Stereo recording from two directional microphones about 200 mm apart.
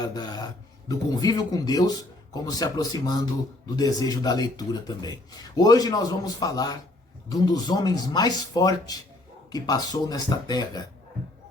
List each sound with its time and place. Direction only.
0.0 s speech: 20° left (ahead or behind)